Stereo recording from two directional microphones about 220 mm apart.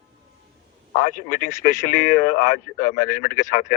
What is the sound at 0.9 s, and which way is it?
Speech, 40° left (ahead or behind).